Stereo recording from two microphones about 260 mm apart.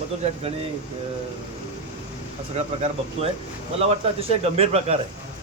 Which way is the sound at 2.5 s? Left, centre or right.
Right.